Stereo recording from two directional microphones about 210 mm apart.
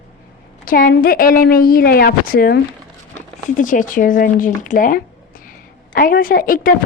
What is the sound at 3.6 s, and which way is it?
A woman's voice, 40° left (ahead or behind).